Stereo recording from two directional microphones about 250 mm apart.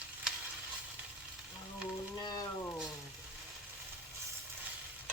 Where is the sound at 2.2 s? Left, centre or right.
Centre.